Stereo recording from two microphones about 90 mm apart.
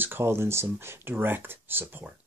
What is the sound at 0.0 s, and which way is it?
Speech, 25° right (ahead or behind).